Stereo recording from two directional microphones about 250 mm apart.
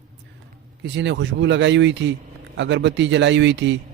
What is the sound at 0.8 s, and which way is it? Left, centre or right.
Speech, right.